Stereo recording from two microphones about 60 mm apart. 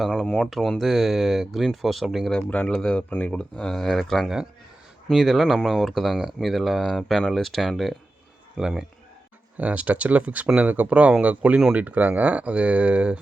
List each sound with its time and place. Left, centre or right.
0.1 s speech: centre
2.6 s speech: centre
9.6 s speech: right